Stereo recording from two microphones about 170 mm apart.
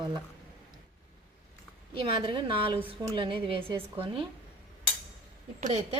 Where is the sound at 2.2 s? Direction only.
30° right (ahead or behind).